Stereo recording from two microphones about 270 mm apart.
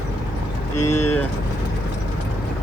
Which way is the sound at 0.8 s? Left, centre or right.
Left.